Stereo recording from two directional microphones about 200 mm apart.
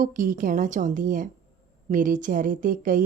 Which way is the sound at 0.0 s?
40° right (ahead or behind).